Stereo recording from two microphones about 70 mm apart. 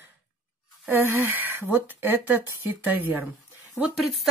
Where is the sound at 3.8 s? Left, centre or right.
Centre.